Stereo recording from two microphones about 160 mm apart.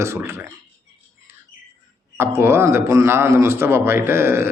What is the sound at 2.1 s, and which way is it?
Speech, 15° right (ahead or behind).